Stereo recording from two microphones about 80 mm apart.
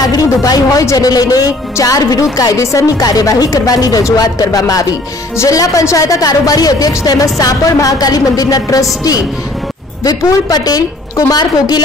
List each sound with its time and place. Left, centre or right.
0.0 s speech: left
5.3 s a woman's voice: left